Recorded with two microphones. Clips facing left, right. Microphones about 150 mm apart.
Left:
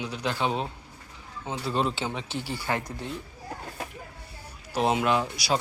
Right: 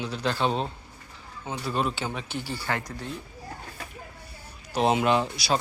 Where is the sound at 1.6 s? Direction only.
25° left (ahead or behind).